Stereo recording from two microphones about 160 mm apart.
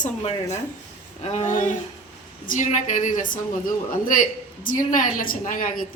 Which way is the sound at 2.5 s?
50° left (ahead or behind).